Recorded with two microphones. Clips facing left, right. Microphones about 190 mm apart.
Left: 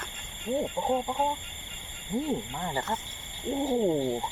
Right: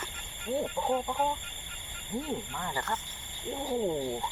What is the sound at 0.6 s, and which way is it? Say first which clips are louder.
Speech: left 1 dB; 25° left (ahead or behind).